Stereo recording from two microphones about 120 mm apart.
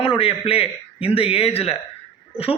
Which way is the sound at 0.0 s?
50° left (ahead or behind).